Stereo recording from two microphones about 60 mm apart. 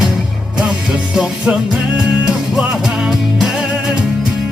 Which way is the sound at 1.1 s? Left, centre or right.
Centre.